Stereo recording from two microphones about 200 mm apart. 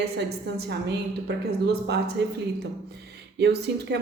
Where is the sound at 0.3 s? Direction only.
75° right (ahead or behind); by 2.2 s 55° right (ahead or behind).